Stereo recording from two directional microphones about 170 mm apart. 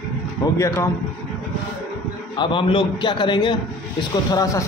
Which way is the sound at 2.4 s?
30° left (ahead or behind).